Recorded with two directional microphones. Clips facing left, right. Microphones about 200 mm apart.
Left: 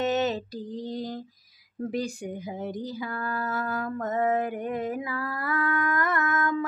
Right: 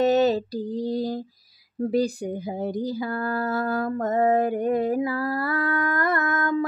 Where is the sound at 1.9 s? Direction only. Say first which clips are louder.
Right 7 dB; 35° right (ahead or behind).